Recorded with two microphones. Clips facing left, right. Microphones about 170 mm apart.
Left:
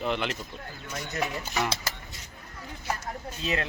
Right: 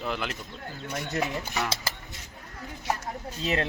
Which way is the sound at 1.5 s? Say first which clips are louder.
Left 1 dB; centre (ahead or behind).